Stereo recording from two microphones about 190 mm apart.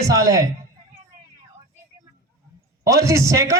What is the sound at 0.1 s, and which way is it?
Speech, 15° right (ahead or behind).